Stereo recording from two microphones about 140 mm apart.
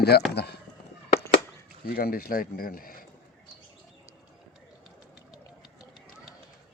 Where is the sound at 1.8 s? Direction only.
90° left.